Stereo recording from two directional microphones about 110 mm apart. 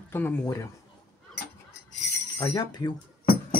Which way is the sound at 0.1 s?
20° left (ahead or behind).